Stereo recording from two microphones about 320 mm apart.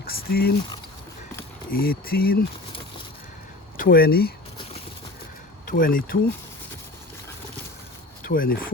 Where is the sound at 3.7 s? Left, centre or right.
Left.